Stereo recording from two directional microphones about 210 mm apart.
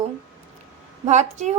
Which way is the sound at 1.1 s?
35° right (ahead or behind).